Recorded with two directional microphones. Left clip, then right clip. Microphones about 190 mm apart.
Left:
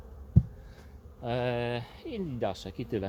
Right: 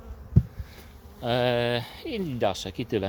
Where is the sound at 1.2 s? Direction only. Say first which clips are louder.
Right 7 dB; 40° right (ahead or behind).